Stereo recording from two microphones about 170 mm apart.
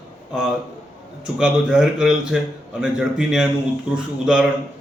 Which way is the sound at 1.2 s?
5° right (ahead or behind).